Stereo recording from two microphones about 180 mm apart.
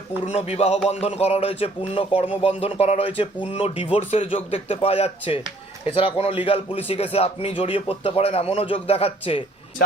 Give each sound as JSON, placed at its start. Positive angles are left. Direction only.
{"t": 0.3, "sound": "speech", "side_deg": 35}